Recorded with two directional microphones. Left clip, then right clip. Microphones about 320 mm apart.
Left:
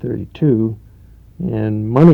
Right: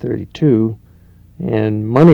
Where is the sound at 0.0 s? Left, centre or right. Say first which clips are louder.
Right 2 dB; right.